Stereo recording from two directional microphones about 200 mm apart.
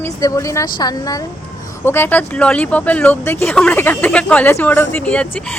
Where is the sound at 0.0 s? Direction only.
15° left (ahead or behind).